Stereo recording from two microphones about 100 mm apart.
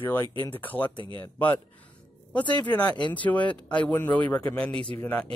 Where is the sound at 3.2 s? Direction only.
15° left (ahead or behind).